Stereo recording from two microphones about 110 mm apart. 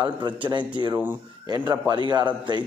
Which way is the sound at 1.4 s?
40° right (ahead or behind).